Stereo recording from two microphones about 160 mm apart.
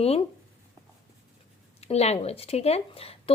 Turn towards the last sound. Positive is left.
turn(degrees=35)  # may be behind; listen again after turning